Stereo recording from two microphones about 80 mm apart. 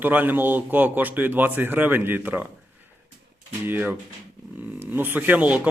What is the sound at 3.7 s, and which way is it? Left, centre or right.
Speech, right.